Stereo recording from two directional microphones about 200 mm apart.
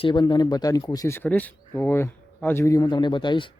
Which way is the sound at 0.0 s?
25° left (ahead or behind).